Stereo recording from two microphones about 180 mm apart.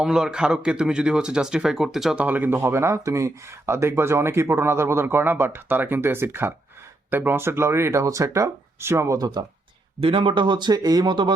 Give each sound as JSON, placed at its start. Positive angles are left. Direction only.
{"t": 0.0, "sound": "speech", "side_deg": -5}